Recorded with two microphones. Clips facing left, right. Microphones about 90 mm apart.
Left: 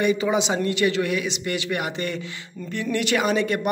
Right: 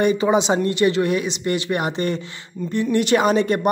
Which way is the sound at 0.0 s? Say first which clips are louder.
Right 4 dB; 35° right (ahead or behind).